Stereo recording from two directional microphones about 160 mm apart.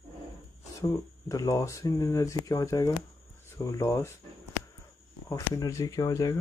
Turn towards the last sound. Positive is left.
turn(degrees=20)  # may be behind; listen again after turning